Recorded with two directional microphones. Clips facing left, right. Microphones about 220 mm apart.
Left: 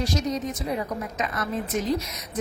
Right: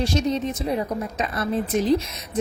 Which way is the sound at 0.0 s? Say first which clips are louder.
Right 4 dB; 25° right (ahead or behind).